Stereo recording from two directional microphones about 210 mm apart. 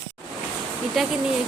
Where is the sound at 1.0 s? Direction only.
Centre (ahead or behind).